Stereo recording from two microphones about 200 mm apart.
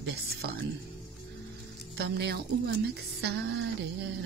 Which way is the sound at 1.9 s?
55° right (ahead or behind).